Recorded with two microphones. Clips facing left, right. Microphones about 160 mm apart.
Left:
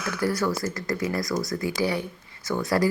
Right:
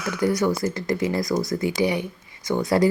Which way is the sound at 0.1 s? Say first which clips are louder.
Right 4 dB; 15° right (ahead or behind).